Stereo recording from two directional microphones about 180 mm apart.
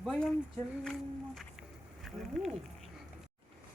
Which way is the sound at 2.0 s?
Centre (ahead or behind).